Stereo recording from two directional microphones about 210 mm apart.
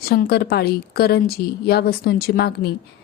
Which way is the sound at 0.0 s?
45° left (ahead or behind).